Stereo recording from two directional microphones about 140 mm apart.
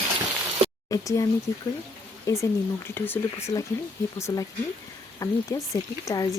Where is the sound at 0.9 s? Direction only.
25° left (ahead or behind).